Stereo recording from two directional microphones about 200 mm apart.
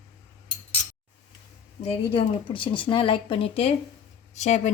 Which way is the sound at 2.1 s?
25° left (ahead or behind).